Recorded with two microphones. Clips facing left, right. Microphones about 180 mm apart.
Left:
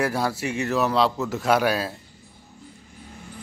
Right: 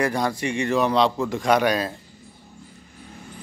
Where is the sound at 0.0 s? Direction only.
5° left (ahead or behind).